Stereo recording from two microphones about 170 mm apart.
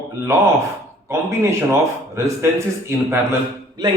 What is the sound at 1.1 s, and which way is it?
Speech, 15° right (ahead or behind).